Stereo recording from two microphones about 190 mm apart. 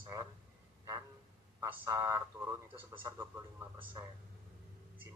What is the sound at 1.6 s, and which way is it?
Speech, 20° right (ahead or behind).